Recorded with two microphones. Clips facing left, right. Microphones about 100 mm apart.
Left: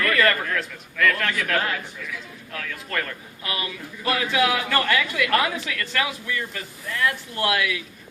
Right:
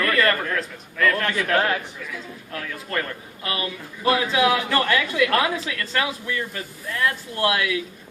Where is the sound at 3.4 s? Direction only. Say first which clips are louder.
Right 2 dB; 35° right (ahead or behind).